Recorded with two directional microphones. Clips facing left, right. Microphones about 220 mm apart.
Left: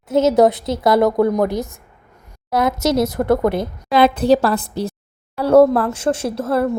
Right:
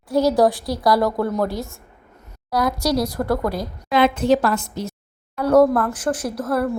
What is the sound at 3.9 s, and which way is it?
A woman's voice, 35° left (ahead or behind).